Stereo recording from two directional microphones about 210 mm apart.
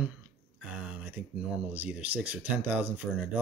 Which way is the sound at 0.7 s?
5° right (ahead or behind).